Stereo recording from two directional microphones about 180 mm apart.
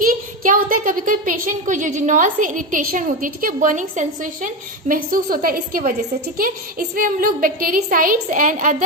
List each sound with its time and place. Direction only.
0.0 s a woman's voice: 50° right (ahead or behind)